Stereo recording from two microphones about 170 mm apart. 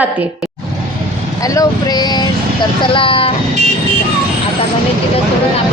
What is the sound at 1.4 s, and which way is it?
Speech, 20° left (ahead or behind).